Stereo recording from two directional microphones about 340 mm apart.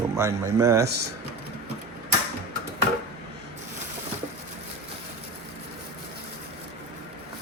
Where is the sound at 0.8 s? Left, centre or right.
Right.